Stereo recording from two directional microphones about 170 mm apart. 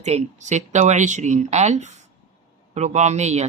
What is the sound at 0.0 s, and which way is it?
Speech, 40° right (ahead or behind).